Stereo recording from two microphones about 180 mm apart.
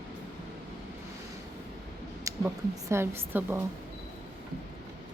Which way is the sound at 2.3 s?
15° right (ahead or behind).